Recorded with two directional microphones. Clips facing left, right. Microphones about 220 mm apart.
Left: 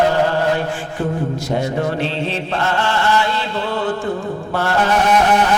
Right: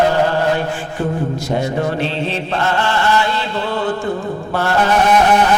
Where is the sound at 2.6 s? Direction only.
15° right (ahead or behind).